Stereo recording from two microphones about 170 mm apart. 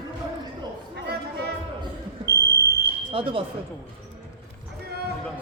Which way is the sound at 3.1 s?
30° right (ahead or behind).